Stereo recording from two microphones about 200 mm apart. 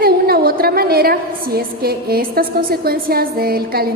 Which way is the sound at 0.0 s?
50° right (ahead or behind).